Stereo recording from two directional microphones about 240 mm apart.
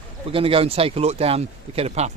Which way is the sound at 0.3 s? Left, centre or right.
Right.